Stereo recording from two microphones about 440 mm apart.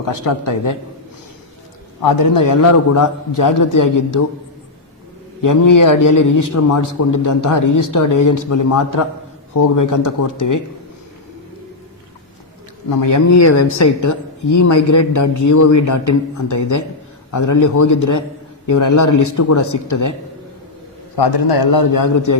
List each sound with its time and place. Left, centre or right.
0.0 s a man's voice: left
2.0 s a man's voice: left
5.4 s a man's voice: left
12.9 s a man's voice: left
21.2 s a man's voice: left